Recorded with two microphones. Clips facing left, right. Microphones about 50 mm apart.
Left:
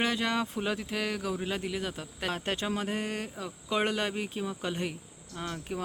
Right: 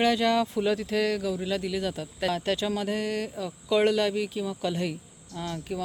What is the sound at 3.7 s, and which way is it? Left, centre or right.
Speech, left.